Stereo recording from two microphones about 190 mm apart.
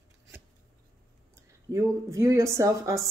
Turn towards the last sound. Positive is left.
turn(degrees=-15)  # may be behind; listen again after turning